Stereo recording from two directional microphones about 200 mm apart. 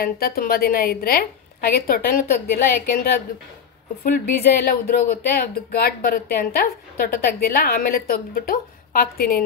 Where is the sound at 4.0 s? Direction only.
50° left (ahead or behind).